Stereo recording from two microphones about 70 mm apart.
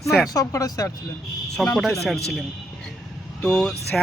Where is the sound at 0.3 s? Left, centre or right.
Left.